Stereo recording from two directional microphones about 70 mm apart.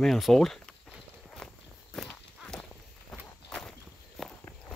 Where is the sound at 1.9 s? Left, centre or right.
Centre.